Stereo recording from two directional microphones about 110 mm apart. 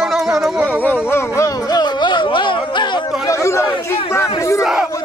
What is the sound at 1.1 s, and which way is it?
Speech, 25° left (ahead or behind).